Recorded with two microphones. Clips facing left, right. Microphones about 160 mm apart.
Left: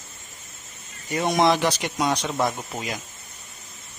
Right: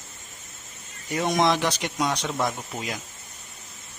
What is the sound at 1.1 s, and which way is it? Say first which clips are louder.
Speech: left 2 dB; 5° left (ahead or behind).